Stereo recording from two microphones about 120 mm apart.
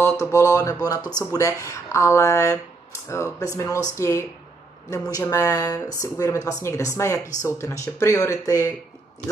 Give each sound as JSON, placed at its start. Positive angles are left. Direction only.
{"t": 0.0, "sound": "speech", "side_deg": 25}